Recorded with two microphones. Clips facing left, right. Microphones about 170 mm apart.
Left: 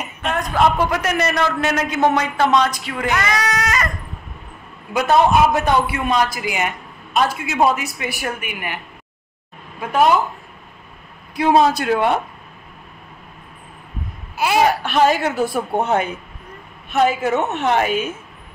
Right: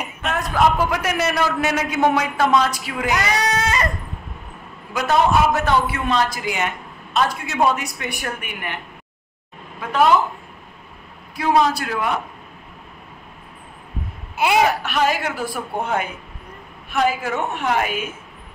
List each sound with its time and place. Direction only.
0.0 s a man's voice: 5° right (ahead or behind)
3.4 s goat: 30° right (ahead or behind)
4.9 s a man's voice: 20° left (ahead or behind)
11.3 s a woman's voice: 20° left (ahead or behind)
14.3 s babbling: 20° right (ahead or behind)
14.8 s a woman's voice: 30° left (ahead or behind)